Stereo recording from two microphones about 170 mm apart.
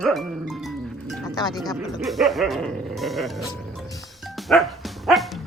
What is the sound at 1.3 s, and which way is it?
Speech, 25° left (ahead or behind).